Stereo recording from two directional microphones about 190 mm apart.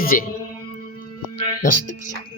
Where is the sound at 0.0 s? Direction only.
50° left (ahead or behind).